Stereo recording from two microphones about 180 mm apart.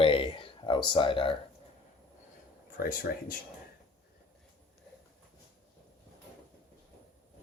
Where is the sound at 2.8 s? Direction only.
50° left (ahead or behind).